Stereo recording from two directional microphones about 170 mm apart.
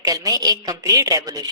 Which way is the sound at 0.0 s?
20° right (ahead or behind).